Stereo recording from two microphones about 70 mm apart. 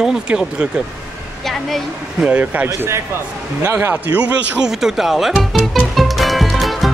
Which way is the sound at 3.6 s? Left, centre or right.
Right.